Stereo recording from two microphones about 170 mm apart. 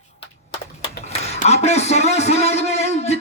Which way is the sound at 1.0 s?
40° left (ahead or behind).